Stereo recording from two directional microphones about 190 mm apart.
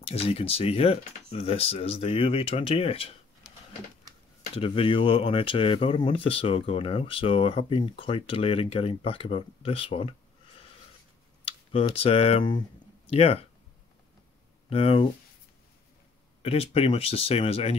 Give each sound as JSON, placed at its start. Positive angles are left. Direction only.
{"t": 0.0, "sound": "speech", "side_deg": 30}
{"t": 4.4, "sound": "speech", "side_deg": 30}
{"t": 11.4, "sound": "speech", "side_deg": 30}
{"t": 14.7, "sound": "speech", "side_deg": 30}
{"t": 16.4, "sound": "speech", "side_deg": 30}